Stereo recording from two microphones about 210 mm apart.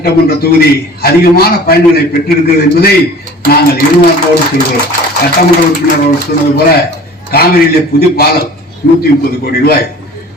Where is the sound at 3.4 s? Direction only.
45° left (ahead or behind).